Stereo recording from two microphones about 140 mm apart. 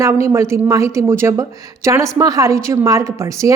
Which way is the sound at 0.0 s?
20° right (ahead or behind).